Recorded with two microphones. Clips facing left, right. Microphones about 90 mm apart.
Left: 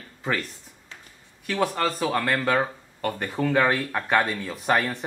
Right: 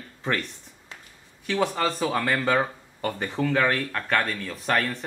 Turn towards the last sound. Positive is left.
turn(degrees=10)  # may be behind; listen again after turning